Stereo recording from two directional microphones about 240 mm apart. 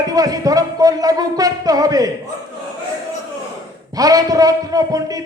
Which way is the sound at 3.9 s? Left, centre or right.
Centre.